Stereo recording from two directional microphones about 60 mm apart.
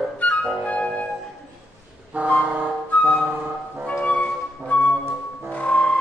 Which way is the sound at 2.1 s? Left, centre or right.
Right.